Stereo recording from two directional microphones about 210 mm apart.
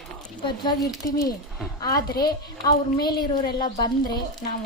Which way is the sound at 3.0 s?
20° left (ahead or behind).